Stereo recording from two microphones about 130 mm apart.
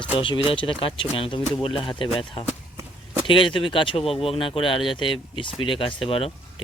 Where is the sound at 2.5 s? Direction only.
15° right (ahead or behind).